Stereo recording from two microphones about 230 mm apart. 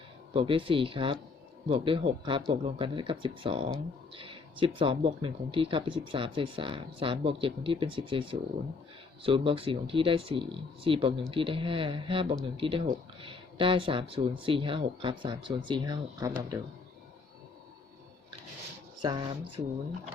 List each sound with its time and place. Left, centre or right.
0.3 s speech: right
19.0 s speech: centre